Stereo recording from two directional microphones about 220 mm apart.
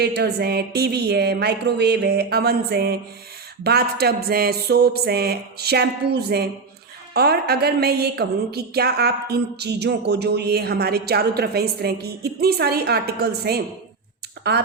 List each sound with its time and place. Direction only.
0.0 s a woman's voice: 45° right (ahead or behind)